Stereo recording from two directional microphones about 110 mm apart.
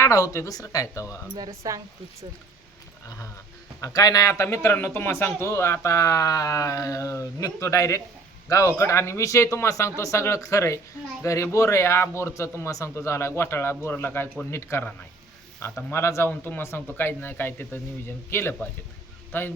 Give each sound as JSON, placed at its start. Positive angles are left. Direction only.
{"t": 0.0, "sound": "speech", "side_deg": 25}
{"t": 1.4, "sound": "speech", "side_deg": -30}
{"t": 3.8, "sound": "a man's voice", "side_deg": 35}
{"t": 15.9, "sound": "a man's voice", "side_deg": 25}